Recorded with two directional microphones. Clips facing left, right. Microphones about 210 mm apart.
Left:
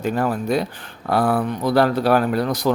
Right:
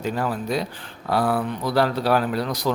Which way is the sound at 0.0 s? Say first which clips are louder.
Left 4 dB; 50° left (ahead or behind).